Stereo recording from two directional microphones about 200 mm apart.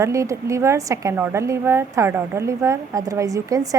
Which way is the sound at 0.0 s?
15° right (ahead or behind).